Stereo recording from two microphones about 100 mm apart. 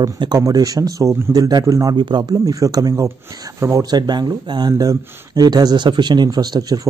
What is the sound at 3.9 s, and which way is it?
Speech, 45° right (ahead or behind).